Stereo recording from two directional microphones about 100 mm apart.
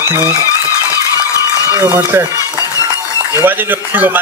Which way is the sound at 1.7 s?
25° right (ahead or behind).